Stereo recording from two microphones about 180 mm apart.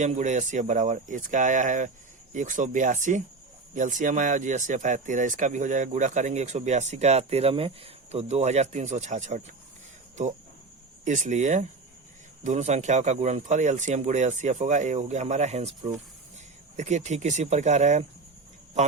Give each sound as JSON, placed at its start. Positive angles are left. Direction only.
{"t": 0.0, "sound": "speech", "side_deg": -40}
{"t": 11.0, "sound": "speech", "side_deg": -45}